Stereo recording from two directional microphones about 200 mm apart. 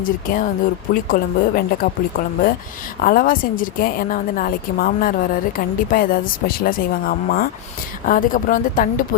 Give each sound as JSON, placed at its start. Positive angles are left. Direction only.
{"t": 0.0, "sound": "a woman's voice", "side_deg": 40}